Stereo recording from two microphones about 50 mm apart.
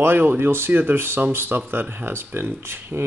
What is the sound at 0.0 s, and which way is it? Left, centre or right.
Speech, right.